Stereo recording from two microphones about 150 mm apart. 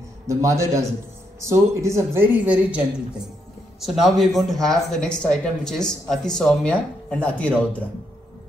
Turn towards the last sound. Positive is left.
turn(degrees=10)  # may be behind; listen again after turning